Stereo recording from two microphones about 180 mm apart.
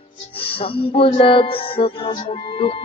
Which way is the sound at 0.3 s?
30° left (ahead or behind).